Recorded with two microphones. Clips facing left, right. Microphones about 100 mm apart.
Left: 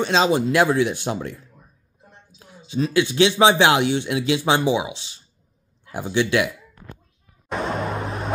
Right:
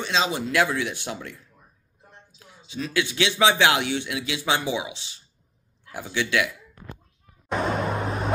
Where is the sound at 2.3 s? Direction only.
35° left (ahead or behind).